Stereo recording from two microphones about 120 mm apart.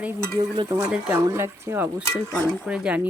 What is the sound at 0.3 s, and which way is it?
Stir, 35° right (ahead or behind).